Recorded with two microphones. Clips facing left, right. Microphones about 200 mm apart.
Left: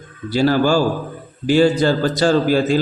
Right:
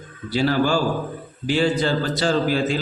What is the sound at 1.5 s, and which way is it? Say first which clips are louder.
Speech: left 6 dB; 40° left (ahead or behind).